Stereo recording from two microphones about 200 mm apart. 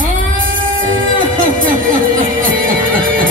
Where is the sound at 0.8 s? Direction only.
45° right (ahead or behind).